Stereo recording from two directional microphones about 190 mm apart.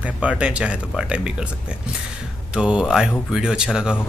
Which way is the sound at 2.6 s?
5° right (ahead or behind).